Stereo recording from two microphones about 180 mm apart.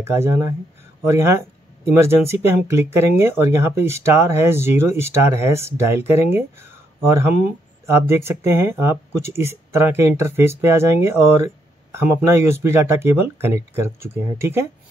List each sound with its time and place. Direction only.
0.0 s speech: 15° right (ahead or behind)